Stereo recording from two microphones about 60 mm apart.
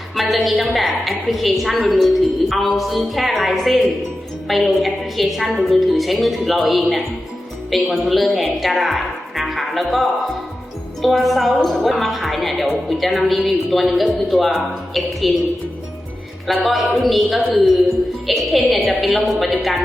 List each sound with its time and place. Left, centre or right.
0.2 s a woman's voice: centre
16.6 s a woman's voice: centre